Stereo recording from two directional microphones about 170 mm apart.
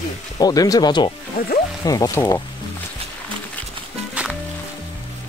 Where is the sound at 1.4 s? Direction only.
60° left (ahead or behind).